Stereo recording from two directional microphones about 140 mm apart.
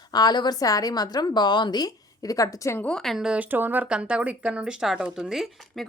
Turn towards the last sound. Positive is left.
turn(degrees=0)  # may be behind; listen again after turning